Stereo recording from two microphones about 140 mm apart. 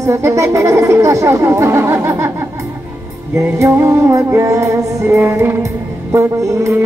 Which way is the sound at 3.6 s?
20° right (ahead or behind).